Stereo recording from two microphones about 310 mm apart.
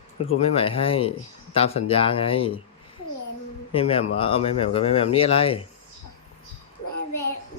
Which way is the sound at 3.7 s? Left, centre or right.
Centre.